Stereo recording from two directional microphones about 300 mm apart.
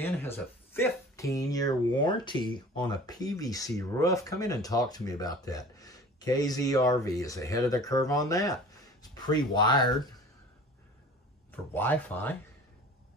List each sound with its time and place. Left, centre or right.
0.0 s speech: centre
11.5 s speech: centre